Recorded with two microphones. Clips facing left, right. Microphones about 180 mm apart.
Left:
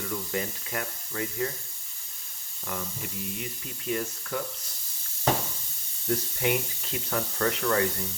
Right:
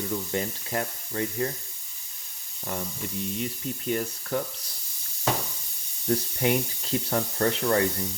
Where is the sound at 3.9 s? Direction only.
35° right (ahead or behind).